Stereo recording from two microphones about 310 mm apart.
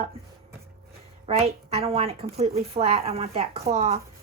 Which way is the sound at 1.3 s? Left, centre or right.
Centre.